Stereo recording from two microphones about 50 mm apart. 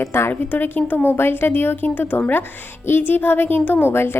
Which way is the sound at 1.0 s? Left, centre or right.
Left.